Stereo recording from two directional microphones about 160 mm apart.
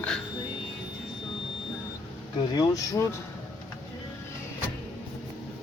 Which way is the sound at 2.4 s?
25° left (ahead or behind).